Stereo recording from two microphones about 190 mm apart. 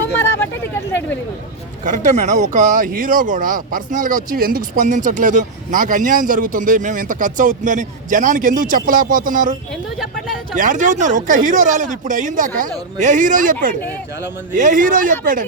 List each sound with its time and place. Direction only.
1.8 s speech: 40° right (ahead or behind)